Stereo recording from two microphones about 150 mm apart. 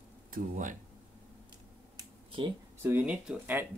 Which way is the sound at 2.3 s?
35° right (ahead or behind).